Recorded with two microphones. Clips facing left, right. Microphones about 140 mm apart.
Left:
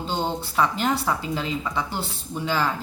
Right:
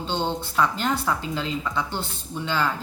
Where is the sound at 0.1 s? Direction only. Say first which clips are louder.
Right 1 dB; 5° left (ahead or behind).